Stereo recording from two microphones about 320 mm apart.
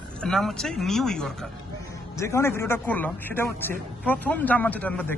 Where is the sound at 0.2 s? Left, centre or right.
Centre.